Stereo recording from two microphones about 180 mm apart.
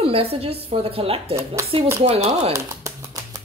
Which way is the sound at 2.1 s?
35° right (ahead or behind).